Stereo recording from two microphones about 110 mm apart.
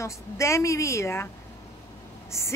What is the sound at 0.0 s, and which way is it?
A woman's voice, 25° left (ahead or behind).